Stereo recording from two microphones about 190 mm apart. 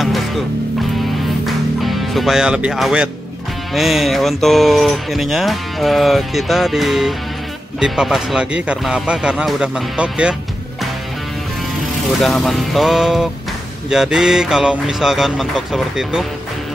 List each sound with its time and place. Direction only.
1.4 s music: centre (ahead or behind)
3.7 s speech: centre (ahead or behind)
12.2 s speech: centre (ahead or behind)